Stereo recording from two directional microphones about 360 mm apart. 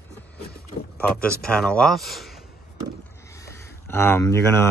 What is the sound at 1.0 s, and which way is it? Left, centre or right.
Speech, centre.